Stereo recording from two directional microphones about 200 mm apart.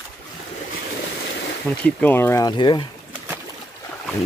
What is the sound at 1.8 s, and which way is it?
Speech, 10° left (ahead or behind).